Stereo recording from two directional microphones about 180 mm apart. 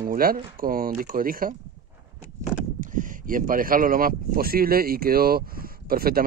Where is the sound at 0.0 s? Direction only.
55° right (ahead or behind).